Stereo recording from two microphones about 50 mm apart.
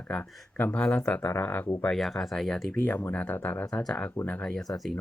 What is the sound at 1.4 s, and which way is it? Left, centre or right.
Speech, left.